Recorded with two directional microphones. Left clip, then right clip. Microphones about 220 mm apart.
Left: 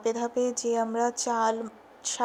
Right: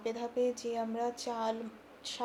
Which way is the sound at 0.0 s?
35° left (ahead or behind).